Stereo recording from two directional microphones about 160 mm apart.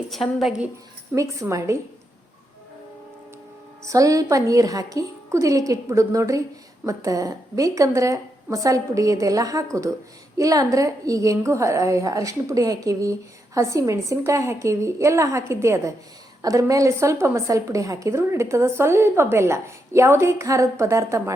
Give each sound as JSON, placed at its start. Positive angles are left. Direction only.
{"t": 0.1, "sound": "a woman's voice", "side_deg": 0}
{"t": 1.1, "sound": "a woman's voice", "side_deg": -20}
{"t": 3.8, "sound": "a woman's voice", "side_deg": -20}